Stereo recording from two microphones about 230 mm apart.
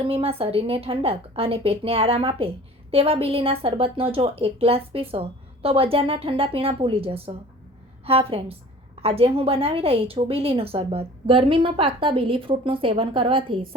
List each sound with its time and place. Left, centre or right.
0.1 s a woman's voice: right